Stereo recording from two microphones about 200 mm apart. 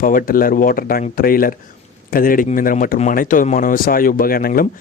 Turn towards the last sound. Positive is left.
turn(degrees=45)  # may be behind; listen again after turning